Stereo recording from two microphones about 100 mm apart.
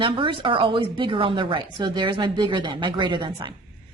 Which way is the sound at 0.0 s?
55° right (ahead or behind).